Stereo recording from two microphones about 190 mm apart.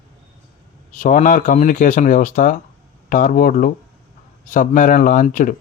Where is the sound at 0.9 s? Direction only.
40° left (ahead or behind).